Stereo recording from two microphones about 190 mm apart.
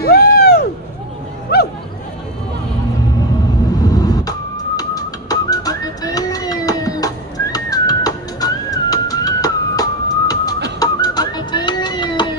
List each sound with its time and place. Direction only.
0.0 s vehicle: 55° left (ahead or behind)
1.5 s music: 55° left (ahead or behind)
3.9 s whistling: 20° left (ahead or behind)
10.8 s a sound: 20° left (ahead or behind)